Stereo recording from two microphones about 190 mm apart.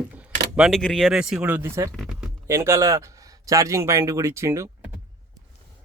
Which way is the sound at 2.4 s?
15° right (ahead or behind).